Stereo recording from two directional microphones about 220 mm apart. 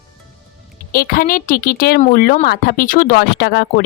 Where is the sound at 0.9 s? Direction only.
40° left (ahead or behind).